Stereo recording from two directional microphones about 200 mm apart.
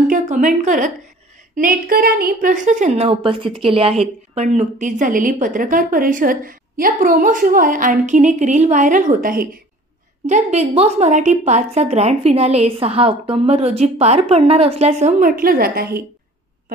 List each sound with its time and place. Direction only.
0.1 s a woman's voice: 40° right (ahead or behind)
10.2 s a woman's voice: 35° right (ahead or behind)